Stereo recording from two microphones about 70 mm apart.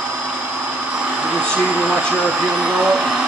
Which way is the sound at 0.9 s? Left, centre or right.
Centre.